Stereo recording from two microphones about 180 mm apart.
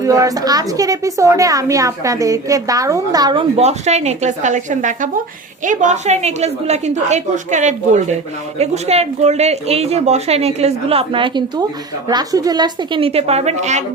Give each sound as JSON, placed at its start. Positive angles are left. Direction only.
{"t": 0.0, "sound": "a woman's voice", "side_deg": -20}
{"t": 3.6, "sound": "speech", "side_deg": -40}